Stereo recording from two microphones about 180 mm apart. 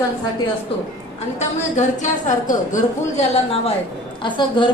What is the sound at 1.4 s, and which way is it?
A woman's voice, 40° left (ahead or behind).